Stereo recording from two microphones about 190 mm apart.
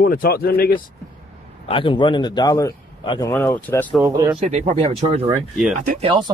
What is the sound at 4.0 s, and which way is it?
Speech, 20° right (ahead or behind).